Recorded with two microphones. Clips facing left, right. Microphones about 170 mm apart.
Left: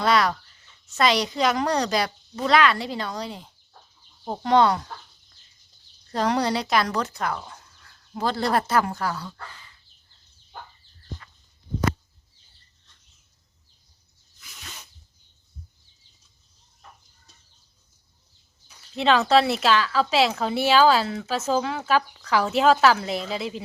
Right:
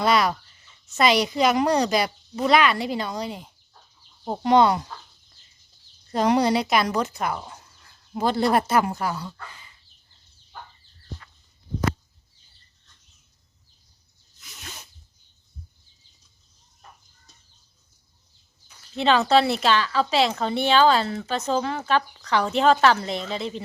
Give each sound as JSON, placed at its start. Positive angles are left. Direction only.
{"t": 0.0, "sound": "a woman's voice", "side_deg": -5}
{"t": 6.1, "sound": "speech", "side_deg": -15}
{"t": 18.9, "sound": "a woman's voice", "side_deg": 0}